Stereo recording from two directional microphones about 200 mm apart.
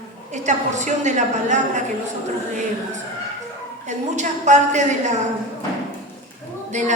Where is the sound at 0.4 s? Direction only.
35° right (ahead or behind).